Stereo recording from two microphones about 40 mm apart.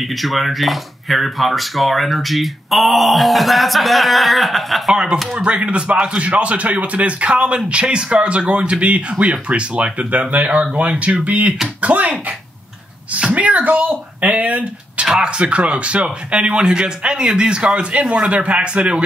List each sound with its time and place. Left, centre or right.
0.0 s speech: centre
4.9 s a man's voice: centre; by 12.1 s right
13.1 s a man's voice: right
15.1 s a man's voice: right